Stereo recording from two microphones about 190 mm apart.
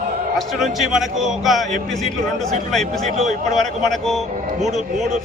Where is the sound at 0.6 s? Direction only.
Centre (ahead or behind).